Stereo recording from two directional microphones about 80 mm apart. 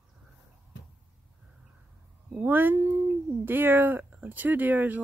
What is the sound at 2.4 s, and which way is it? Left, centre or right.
Speech, right.